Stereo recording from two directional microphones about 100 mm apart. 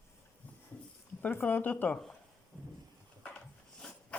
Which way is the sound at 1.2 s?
20° left (ahead or behind).